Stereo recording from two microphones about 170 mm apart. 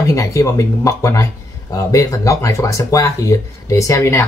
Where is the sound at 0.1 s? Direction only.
20° left (ahead or behind).